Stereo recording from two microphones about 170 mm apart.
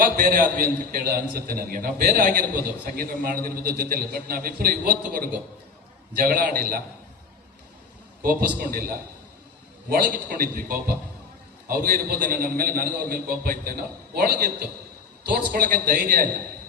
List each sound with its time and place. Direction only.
0.0 s a man's voice: 55° right (ahead or behind)
8.2 s a man's voice: 60° right (ahead or behind)